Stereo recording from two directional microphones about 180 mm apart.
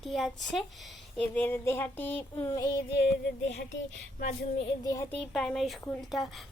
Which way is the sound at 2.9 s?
70° left (ahead or behind).